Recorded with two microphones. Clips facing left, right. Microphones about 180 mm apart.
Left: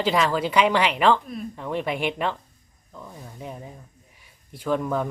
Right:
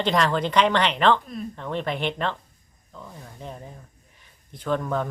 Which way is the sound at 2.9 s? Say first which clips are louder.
Left 1 dB; 5° left (ahead or behind).